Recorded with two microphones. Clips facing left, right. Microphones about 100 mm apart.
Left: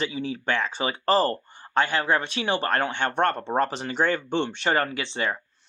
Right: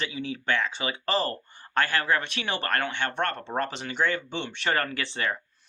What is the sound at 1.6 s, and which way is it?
Speech, 20° left (ahead or behind).